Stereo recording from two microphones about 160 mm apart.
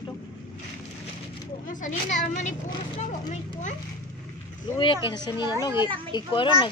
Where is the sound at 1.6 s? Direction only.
50° left (ahead or behind).